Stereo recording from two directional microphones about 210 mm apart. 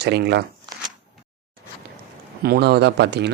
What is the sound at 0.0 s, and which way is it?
Speech, 50° right (ahead or behind).